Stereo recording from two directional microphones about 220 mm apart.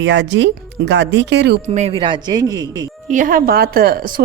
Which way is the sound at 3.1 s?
35° right (ahead or behind).